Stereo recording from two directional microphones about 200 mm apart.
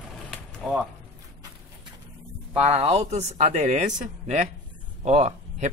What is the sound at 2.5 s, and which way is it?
Speech, 30° right (ahead or behind).